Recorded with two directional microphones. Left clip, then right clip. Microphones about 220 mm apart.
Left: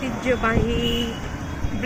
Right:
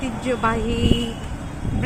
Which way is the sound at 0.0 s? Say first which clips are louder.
Even; 15° right (ahead or behind).